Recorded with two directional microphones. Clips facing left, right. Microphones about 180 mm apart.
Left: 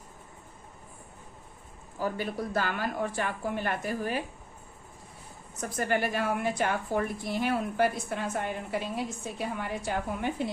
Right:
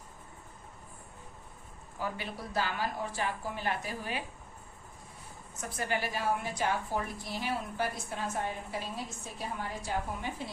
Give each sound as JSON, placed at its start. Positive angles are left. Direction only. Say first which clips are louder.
{"t": 2.0, "sound": "a woman's voice", "louder": "left 6 dB", "side_deg": 45}
{"t": 5.5, "sound": "a woman's voice", "louder": "left 5 dB", "side_deg": 45}